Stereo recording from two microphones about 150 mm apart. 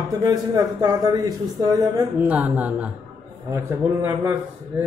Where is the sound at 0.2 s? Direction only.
25° right (ahead or behind).